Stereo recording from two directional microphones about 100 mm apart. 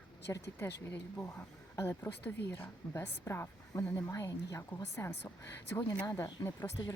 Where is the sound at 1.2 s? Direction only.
20° left (ahead or behind).